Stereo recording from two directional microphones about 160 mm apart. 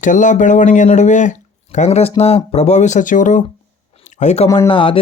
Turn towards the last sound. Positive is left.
turn(degrees=35)  # may be behind; listen again after turning